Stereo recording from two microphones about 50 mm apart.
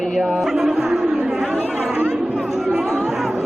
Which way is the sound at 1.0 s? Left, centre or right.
Centre.